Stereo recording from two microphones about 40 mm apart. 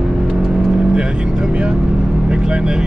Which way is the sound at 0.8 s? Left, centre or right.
Centre.